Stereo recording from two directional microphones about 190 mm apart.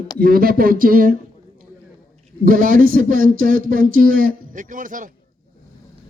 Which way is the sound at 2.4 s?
45° right (ahead or behind).